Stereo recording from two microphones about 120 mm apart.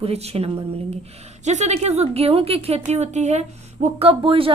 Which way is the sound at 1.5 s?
70° right (ahead or behind).